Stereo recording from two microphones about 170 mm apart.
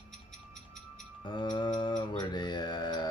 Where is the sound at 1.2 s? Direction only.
25° left (ahead or behind).